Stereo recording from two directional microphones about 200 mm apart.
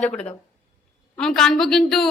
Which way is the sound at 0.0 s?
5° left (ahead or behind).